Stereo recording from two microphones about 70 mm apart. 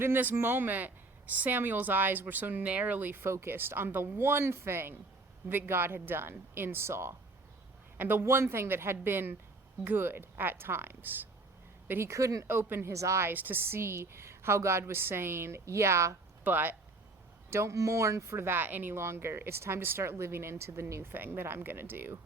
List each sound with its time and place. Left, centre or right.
0.0 s speech: right
3.2 s speech: right
12.1 s a woman's voice: right
12.5 s speech: right
12.9 s a woman's voice: right
13.3 s speech: right
16.4 s speech: right
17.5 s speech: right